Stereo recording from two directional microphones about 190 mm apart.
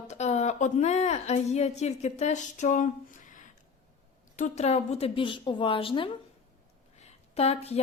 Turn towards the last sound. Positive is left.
turn(degrees=35)  # may be behind; listen again after turning